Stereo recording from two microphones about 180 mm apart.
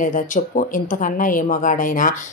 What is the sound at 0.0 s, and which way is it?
Speech, 45° left (ahead or behind).